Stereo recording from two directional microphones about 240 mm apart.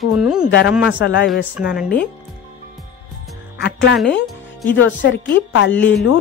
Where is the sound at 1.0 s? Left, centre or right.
Left.